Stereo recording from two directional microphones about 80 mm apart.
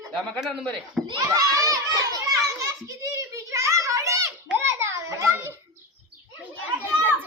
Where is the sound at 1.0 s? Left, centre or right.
Centre.